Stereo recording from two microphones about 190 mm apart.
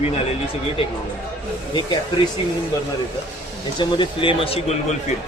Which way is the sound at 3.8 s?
25° left (ahead or behind).